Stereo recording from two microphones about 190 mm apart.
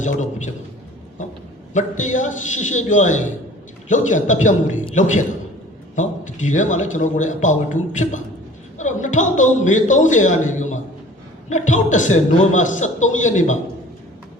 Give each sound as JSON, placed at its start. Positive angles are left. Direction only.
{"t": 0.0, "sound": "speech", "side_deg": 40}
{"t": 1.7, "sound": "speech", "side_deg": 40}